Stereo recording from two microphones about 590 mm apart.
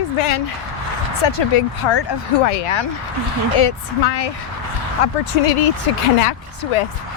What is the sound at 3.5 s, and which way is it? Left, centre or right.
A woman's voice, left.